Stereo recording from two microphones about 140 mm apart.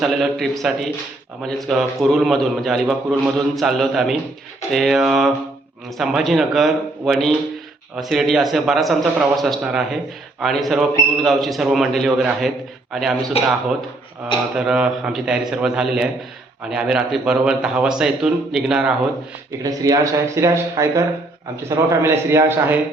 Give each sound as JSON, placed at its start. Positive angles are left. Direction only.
{"t": 0.0, "sound": "a man's voice", "side_deg": 0}
{"t": 14.5, "sound": "a man's voice", "side_deg": -5}
{"t": 19.6, "sound": "speech", "side_deg": -25}